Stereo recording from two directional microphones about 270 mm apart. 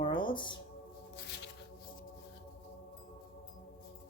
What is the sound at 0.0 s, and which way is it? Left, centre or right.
Music, centre.